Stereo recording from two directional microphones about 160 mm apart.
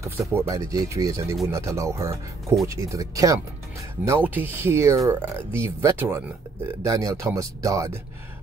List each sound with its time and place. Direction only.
0.0 s speech: 20° right (ahead or behind)